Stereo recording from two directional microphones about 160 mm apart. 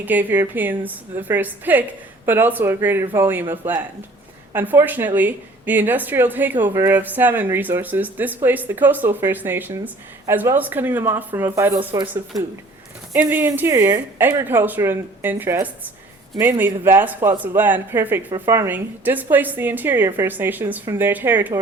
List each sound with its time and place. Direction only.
0.0 s a woman's voice: 10° right (ahead or behind)